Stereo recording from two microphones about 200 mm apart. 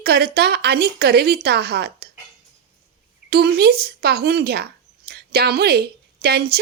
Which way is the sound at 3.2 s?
50° right (ahead or behind).